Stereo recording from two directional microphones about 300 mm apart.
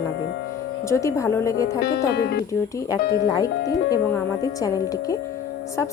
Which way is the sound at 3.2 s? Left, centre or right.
Centre.